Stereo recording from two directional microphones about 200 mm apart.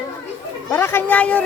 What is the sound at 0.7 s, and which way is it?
Speech, 10° left (ahead or behind).